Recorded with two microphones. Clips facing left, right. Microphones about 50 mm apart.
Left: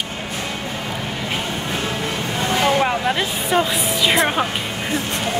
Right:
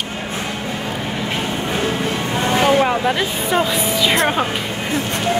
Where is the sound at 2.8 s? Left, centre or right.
Centre.